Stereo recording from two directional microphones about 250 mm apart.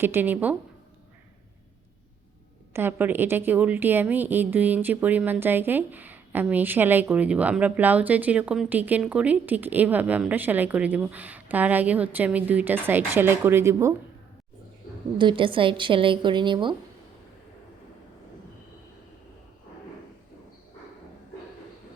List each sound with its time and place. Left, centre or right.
0.0 s a woman's voice: centre
2.7 s a woman's voice: centre
15.2 s a woman's voice: centre